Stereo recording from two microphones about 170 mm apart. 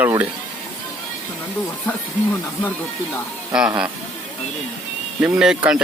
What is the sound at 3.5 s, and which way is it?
Speech, 5° right (ahead or behind).